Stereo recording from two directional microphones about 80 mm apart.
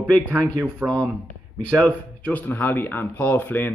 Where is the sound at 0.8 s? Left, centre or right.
Right.